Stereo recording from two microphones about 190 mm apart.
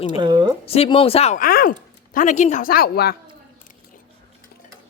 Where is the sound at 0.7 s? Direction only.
30° left (ahead or behind).